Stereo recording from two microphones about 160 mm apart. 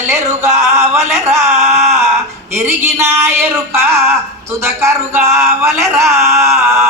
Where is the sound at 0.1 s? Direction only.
15° right (ahead or behind).